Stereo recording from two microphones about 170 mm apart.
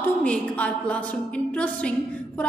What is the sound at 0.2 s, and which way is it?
Speech, 5° left (ahead or behind).